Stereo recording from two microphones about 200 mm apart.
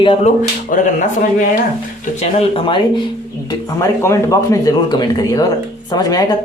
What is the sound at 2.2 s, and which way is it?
Speech, 25° left (ahead or behind).